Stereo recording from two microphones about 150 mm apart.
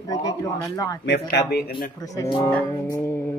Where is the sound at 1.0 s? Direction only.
90° left.